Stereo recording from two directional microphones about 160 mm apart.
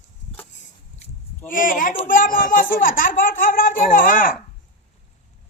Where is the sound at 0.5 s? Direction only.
50° left (ahead or behind).